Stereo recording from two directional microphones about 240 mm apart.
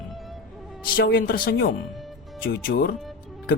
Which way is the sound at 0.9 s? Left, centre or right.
Left.